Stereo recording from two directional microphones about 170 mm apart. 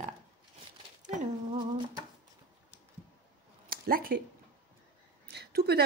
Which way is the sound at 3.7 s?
60° right (ahead or behind).